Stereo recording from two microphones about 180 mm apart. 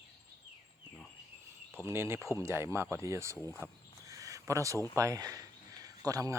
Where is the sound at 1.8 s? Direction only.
15° right (ahead or behind).